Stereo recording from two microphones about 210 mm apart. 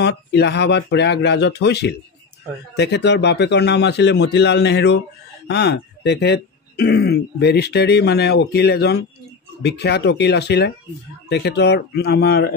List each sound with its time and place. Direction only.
0.0 s speech: 55° left (ahead or behind)